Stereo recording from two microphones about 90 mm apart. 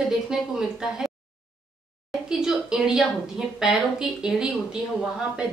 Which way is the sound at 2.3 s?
5° right (ahead or behind).